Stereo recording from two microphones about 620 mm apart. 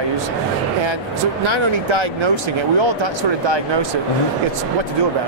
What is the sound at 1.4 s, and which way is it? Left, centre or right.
Speech, right.